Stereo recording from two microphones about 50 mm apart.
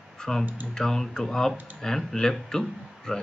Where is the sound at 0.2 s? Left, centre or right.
Centre.